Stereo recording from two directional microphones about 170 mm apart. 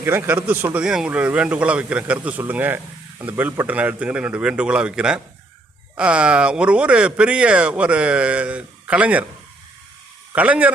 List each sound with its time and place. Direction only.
0.0 s speech: 10° right (ahead or behind)
10.3 s speech: 10° right (ahead or behind)